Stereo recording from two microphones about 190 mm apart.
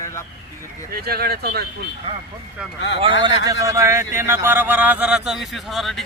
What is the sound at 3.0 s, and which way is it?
A man's voice, 25° right (ahead or behind).